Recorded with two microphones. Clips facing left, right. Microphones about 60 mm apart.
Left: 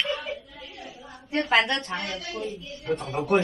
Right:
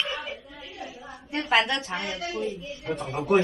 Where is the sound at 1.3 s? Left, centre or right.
Centre.